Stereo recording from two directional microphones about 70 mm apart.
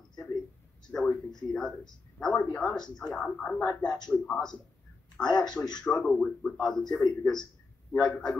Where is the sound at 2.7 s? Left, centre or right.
Centre.